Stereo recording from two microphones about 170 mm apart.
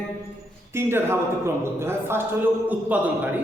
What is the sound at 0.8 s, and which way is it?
A man's voice, 15° right (ahead or behind).